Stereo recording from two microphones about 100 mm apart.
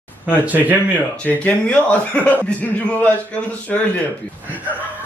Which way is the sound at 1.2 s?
15° left (ahead or behind).